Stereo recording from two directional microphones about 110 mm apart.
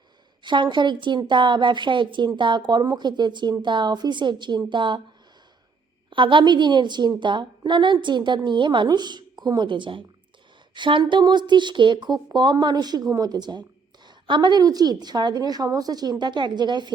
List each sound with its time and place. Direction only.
0.4 s a woman's voice: 45° right (ahead or behind)
6.1 s a woman's voice: 50° right (ahead or behind)